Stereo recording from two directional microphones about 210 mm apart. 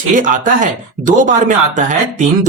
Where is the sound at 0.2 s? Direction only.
40° right (ahead or behind).